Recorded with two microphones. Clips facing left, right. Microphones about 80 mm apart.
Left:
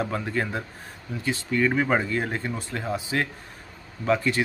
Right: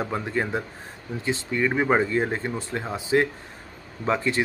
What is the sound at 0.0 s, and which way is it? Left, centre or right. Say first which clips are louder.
Speech: right 1 dB; centre.